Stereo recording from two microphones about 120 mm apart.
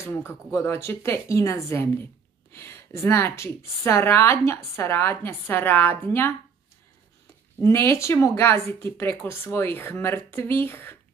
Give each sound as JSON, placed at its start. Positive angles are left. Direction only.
{"t": 0.0, "sound": "a woman's voice", "side_deg": 20}
{"t": 7.6, "sound": "a woman's voice", "side_deg": 20}